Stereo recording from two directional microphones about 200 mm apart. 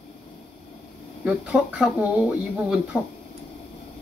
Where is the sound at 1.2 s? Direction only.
5° right (ahead or behind).